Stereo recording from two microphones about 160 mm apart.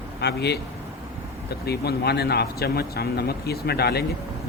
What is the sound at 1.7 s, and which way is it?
Speech, 90° left.